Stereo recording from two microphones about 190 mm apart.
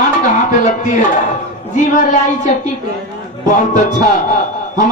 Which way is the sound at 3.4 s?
40° left (ahead or behind).